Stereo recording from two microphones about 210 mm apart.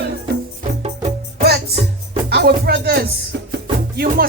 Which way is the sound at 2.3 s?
50° right (ahead or behind).